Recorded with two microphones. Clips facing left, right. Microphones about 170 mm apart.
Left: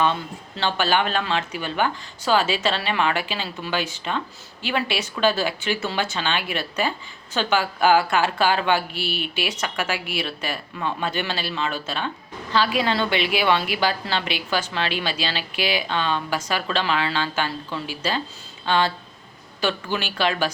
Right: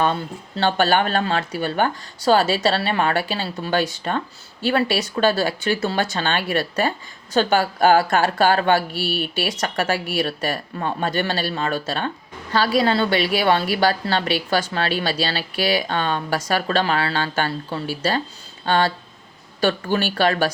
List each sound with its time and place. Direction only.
0.0 s a woman's voice: 45° right (ahead or behind)